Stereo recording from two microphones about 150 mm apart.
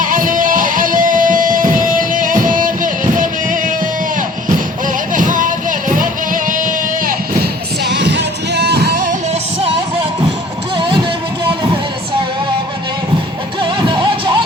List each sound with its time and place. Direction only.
0.0 s music: 65° right (ahead or behind)
5.1 s music: 60° right (ahead or behind)
8.5 s music: 90° right
13.6 s music: 30° right (ahead or behind)